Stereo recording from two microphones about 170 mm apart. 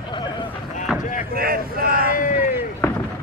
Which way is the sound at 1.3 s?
60° right (ahead or behind).